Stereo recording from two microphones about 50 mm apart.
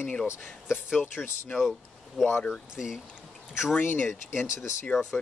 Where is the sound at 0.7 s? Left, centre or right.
Centre.